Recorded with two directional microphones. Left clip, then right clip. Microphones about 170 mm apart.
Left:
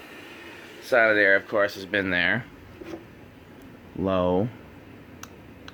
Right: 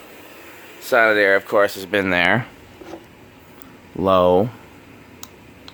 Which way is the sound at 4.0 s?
25° right (ahead or behind).